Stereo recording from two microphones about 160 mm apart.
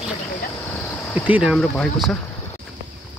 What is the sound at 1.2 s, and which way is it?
Speech, 5° right (ahead or behind).